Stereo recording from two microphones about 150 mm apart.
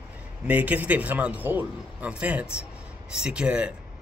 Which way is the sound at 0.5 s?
10° right (ahead or behind).